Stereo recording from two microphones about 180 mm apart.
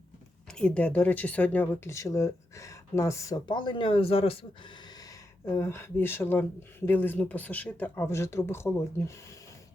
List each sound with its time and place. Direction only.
0.6 s speech: 5° left (ahead or behind); by 4.4 s 30° left (ahead or behind)
5.5 s speech: 15° left (ahead or behind)